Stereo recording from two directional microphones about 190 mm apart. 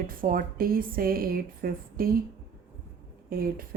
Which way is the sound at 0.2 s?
50° right (ahead or behind).